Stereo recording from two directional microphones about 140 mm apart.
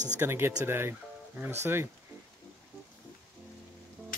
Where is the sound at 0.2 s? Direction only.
15° right (ahead or behind).